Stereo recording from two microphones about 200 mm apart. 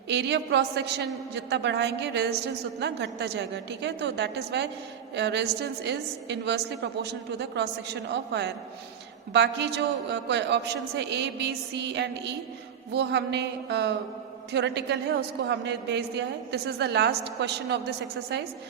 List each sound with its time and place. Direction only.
0.1 s a man's voice: 60° right (ahead or behind)